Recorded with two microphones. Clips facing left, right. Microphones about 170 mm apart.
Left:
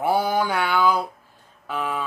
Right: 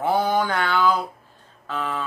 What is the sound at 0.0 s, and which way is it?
Mantra, 10° left (ahead or behind).